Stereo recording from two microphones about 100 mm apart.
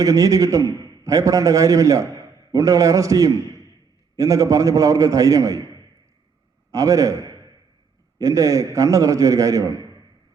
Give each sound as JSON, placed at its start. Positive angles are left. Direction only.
{"t": 0.0, "sound": "a man's voice", "side_deg": -35}
{"t": 6.7, "sound": "a man's voice", "side_deg": -35}